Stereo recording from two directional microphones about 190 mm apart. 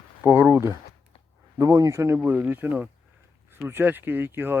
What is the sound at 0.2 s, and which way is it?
Speech, 10° right (ahead or behind).